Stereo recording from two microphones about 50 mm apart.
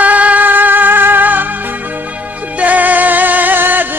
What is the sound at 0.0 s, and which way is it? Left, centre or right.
Music, right.